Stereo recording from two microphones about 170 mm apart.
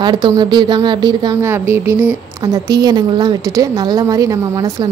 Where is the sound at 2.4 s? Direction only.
25° right (ahead or behind).